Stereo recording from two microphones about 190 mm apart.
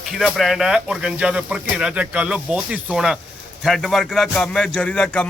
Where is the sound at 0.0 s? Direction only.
Centre (ahead or behind).